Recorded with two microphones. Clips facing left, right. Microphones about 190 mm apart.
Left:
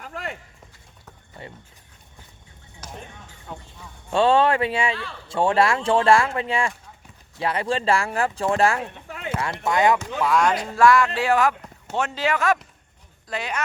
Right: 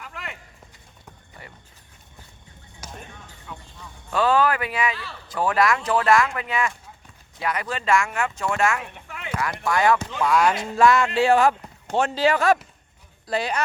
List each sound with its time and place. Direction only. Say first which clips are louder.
0.0 s a sound: left 5 dB; 40° left (ahead or behind)
1.4 s speech: left 6 dB; 25° left (ahead or behind)
2.8 s music: left 1 dB; 10° right (ahead or behind)
3.5 s music: left 3 dB; 35° left (ahead or behind)
4.1 s speech: left 2 dB; 30° left (ahead or behind)
9.3 s speech: left 1 dB; 25° left (ahead or behind)
10.2 s speech: even; centre (ahead or behind)
10.6 s speech: left 1 dB; 20° right (ahead or behind)